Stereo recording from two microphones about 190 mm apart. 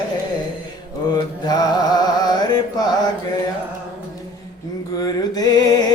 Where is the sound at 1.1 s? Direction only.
20° left (ahead or behind).